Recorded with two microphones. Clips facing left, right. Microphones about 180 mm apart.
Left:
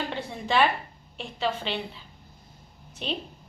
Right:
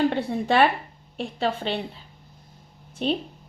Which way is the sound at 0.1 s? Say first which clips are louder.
Right 5 dB; 60° right (ahead or behind).